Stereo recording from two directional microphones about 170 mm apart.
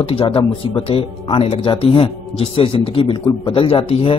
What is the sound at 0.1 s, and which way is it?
Speech, 30° left (ahead or behind).